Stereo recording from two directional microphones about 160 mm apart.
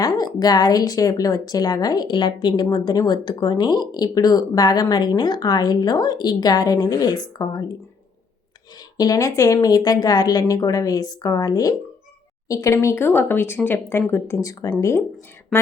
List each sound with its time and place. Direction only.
0.0 s a woman's voice: 25° left (ahead or behind)
9.0 s a woman's voice: 20° left (ahead or behind)